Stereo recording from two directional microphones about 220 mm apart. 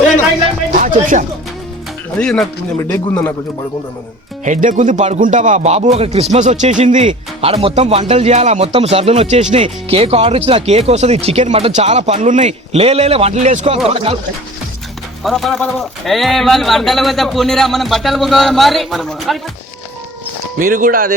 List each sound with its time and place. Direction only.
2.1 s a man's voice: 5° left (ahead or behind)
4.4 s speech: 35° right (ahead or behind)
15.2 s speech: centre (ahead or behind)
20.6 s speech: 40° right (ahead or behind)